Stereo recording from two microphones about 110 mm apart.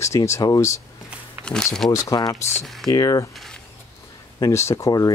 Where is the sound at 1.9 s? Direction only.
30° left (ahead or behind).